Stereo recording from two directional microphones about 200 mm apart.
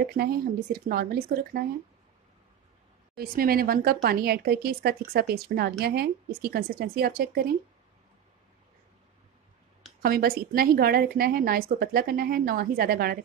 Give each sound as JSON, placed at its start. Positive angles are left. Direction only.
{"t": 0.0, "sound": "a woman's voice", "side_deg": -50}
{"t": 3.2, "sound": "a woman's voice", "side_deg": -50}
{"t": 10.0, "sound": "a woman's voice", "side_deg": -50}